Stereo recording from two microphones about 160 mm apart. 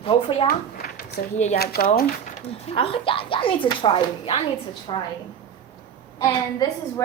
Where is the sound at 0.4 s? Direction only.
70° left (ahead or behind).